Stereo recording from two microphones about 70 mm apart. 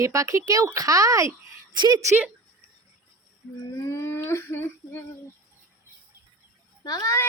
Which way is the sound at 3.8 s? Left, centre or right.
Left.